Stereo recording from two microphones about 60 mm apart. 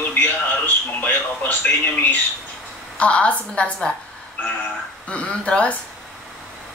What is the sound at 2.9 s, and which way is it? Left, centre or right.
Speech, centre.